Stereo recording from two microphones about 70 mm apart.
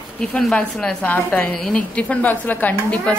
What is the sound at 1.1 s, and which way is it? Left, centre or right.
Speech, left.